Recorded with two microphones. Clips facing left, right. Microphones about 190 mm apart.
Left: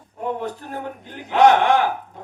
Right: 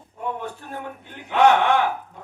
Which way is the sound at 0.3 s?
40° left (ahead or behind).